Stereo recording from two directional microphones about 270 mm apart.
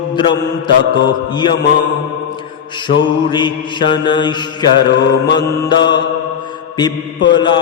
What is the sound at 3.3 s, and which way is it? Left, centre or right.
Mantra, centre.